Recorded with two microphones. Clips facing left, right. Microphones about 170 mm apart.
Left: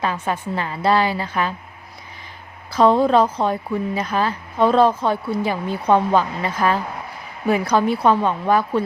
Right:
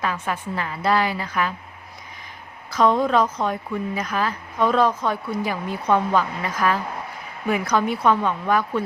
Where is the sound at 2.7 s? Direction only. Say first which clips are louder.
Left 4 dB; 30° left (ahead or behind).